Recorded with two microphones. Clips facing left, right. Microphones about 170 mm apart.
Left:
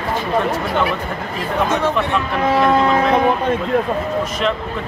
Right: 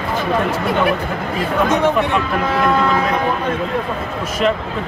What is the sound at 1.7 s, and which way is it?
Speech, 15° right (ahead or behind).